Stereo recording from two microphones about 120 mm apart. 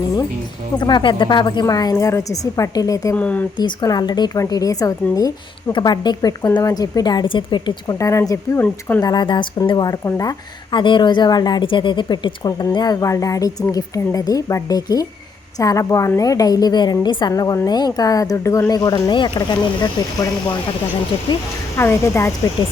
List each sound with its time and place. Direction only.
0.8 s a woman's voice: 40° left (ahead or behind)
3.2 s speech: 10° left (ahead or behind)
3.6 s a woman's voice: 35° left (ahead or behind)
7.9 s speech: 25° left (ahead or behind)
9.0 s a woman's voice: 35° left (ahead or behind)
21.8 s speech: 20° left (ahead or behind)